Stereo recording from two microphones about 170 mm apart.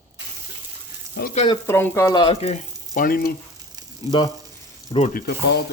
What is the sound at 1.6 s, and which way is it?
Speech, 15° left (ahead or behind).